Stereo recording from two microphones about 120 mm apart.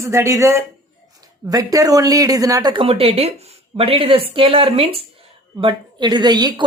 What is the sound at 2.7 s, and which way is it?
A woman's voice, 50° right (ahead or behind).